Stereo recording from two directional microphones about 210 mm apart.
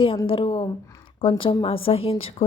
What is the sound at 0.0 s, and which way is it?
A woman's voice, 25° left (ahead or behind).